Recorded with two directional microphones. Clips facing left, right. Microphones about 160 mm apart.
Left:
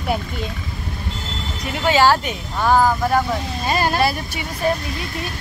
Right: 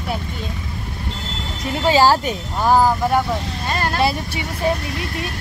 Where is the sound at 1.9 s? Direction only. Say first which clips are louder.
Right 1 dB; 35° right (ahead or behind).